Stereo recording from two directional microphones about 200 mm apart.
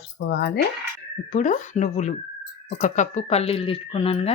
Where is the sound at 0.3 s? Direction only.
60° left (ahead or behind).